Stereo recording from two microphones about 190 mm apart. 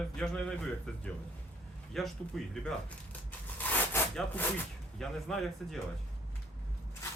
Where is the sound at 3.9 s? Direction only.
10° left (ahead or behind).